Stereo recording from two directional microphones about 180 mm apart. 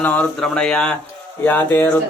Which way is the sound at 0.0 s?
10° left (ahead or behind).